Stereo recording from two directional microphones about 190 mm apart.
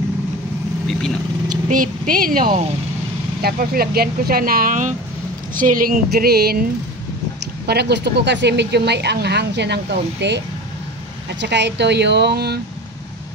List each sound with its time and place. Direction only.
1.7 s speech: 45° right (ahead or behind)
7.6 s speech: 60° right (ahead or behind)